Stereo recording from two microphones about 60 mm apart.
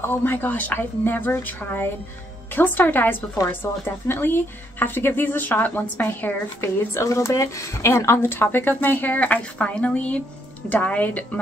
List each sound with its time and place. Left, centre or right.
0.0 s speech: left
6.6 s speech: left
8.2 s a woman's voice: left